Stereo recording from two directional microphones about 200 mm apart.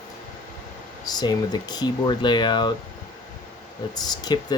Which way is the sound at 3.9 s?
20° left (ahead or behind).